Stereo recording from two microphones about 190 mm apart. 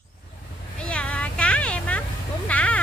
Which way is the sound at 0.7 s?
5° left (ahead or behind).